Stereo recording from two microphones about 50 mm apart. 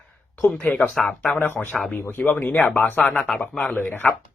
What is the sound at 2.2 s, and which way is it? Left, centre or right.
Speech, left.